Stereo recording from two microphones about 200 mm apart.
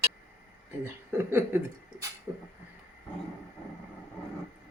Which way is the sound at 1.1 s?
10° right (ahead or behind).